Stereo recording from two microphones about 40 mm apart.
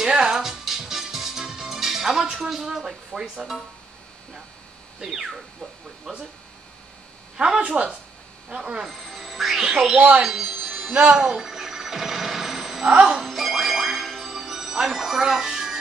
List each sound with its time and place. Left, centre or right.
0.1 s music: right
0.4 s music: centre
2.3 s speech: centre
5.0 s speech: centre
7.3 s speech: right
8.8 s speech: centre
9.9 s speech: right
10.2 s a sound: centre
13.2 s music: centre